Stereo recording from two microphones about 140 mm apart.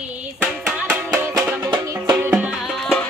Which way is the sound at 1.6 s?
25° right (ahead or behind).